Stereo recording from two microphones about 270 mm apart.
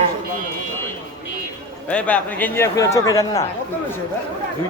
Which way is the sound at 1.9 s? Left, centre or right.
Centre.